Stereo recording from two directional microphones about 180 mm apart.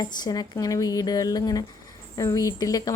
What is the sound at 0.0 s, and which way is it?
Speech, 20° left (ahead or behind).